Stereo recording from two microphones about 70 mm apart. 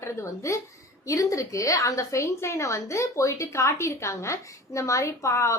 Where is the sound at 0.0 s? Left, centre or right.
Left.